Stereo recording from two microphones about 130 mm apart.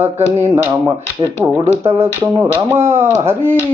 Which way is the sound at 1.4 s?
20° right (ahead or behind).